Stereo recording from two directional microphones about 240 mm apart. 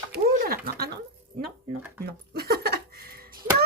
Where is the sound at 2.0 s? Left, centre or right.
Right.